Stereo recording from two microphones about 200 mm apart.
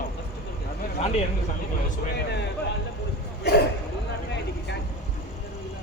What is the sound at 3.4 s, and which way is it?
Speech, 55° left (ahead or behind).